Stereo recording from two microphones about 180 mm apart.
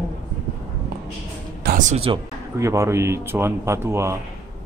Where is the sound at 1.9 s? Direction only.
30° right (ahead or behind).